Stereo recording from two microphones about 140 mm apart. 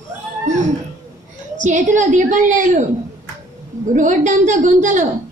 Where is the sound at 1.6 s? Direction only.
65° right (ahead or behind).